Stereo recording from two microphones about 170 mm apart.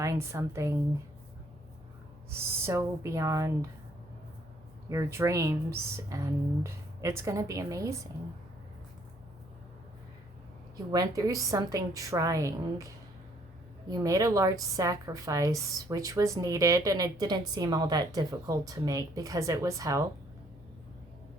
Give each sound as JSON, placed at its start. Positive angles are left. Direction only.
{"t": 0.0, "sound": "speech", "side_deg": -15}
{"t": 2.3, "sound": "speech", "side_deg": -15}
{"t": 4.9, "sound": "speech", "side_deg": -15}
{"t": 10.9, "sound": "a woman's voice", "side_deg": -20}